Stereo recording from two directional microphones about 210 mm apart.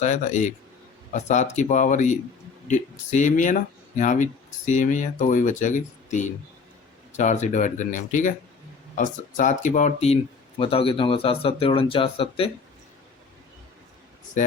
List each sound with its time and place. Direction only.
0.0 s speech: 35° left (ahead or behind)